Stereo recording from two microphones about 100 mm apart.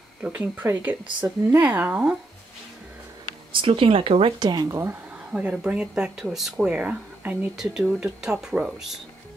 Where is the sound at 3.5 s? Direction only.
60° right (ahead or behind).